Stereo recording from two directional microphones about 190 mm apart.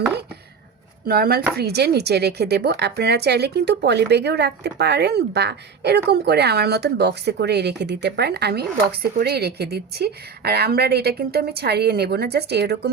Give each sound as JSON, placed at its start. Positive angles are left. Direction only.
{"t": 1.0, "sound": "speech", "side_deg": -50}